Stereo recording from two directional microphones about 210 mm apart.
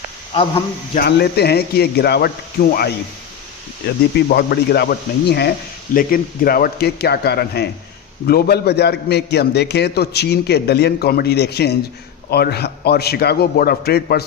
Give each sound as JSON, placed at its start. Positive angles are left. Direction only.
{"t": 0.9, "sound": "a man's voice", "side_deg": 50}
{"t": 4.3, "sound": "a man's voice", "side_deg": 50}